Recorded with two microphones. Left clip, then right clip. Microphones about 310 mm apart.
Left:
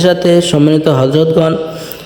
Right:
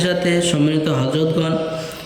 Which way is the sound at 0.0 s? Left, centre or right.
Centre.